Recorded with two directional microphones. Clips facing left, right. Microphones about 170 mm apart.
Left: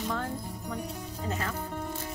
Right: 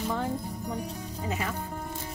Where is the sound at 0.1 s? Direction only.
15° right (ahead or behind).